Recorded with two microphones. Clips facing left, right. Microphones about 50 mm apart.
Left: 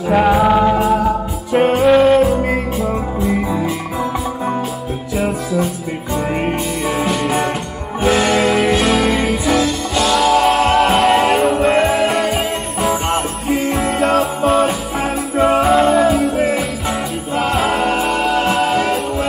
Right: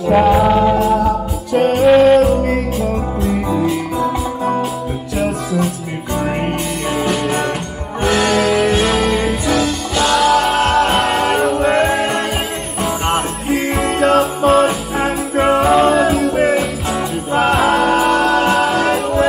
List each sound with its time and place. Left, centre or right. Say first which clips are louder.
0.0 s music: right 1 dB; centre
7.0 s music: right 1 dB; centre
14.0 s music: right 3 dB; right
15.0 s music: even; right
15.6 s music: right 1 dB; centre
17.3 s music: right 4 dB; right
17.6 s music: right 1 dB; centre